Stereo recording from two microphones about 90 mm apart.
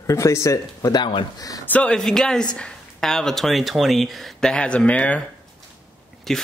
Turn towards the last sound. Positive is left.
turn(degrees=5)  # may be behind; listen again after turning